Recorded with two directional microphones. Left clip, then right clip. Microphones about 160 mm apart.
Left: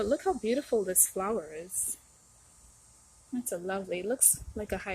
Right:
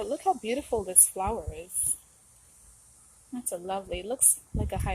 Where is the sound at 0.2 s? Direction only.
30° left (ahead or behind).